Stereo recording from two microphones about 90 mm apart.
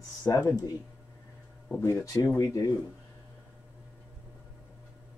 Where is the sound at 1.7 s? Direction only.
20° left (ahead or behind).